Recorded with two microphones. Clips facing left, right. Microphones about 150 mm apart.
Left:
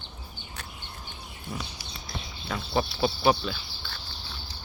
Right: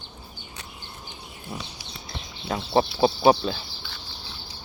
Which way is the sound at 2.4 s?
30° right (ahead or behind).